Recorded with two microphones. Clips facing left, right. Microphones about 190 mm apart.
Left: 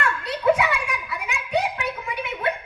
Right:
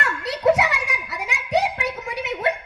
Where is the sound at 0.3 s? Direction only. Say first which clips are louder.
Right 2 dB; 80° right.